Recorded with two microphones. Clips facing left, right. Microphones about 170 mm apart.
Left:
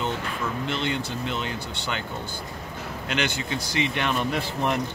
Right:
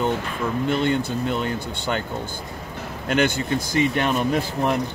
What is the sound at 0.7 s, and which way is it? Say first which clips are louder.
Speech: right 9 dB; 50° right (ahead or behind).